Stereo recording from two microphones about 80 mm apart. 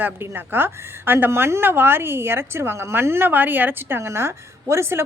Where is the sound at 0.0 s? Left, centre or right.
Right.